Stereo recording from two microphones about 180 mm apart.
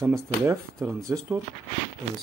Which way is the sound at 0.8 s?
Centre (ahead or behind).